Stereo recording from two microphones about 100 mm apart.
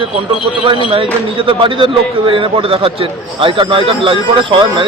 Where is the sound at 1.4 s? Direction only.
60° right (ahead or behind).